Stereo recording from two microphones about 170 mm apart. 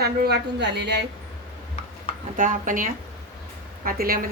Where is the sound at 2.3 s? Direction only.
50° right (ahead or behind).